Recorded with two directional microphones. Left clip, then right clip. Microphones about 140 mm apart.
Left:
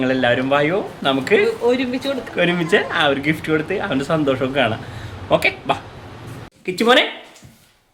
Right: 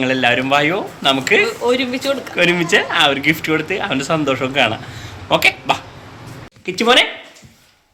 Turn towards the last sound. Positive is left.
turn(degrees=15)  # may be behind; listen again after turning